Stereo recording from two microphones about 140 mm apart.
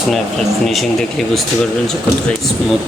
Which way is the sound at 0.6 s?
Centre (ahead or behind).